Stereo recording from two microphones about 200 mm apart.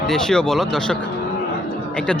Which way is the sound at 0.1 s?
Centre (ahead or behind).